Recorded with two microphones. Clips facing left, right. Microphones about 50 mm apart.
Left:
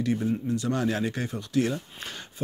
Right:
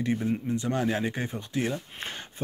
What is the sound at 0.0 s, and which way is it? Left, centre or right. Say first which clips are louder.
Speech: left 1 dB; right.